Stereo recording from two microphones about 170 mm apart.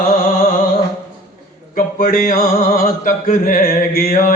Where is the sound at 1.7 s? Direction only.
55° left (ahead or behind).